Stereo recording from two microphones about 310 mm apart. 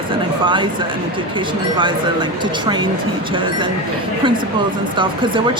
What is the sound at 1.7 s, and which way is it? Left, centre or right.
Speech, centre.